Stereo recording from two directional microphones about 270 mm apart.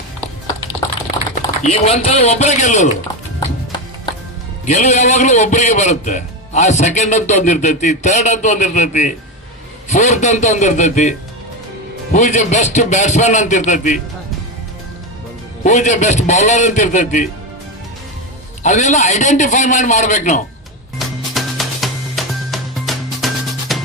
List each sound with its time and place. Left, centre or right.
1.6 s a man's voice: left
4.6 s a man's voice: left
12.1 s a man's voice: left
15.6 s a man's voice: left
18.6 s a man's voice: left
21.3 s music: centre